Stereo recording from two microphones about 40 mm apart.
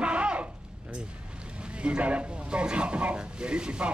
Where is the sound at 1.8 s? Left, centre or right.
Right.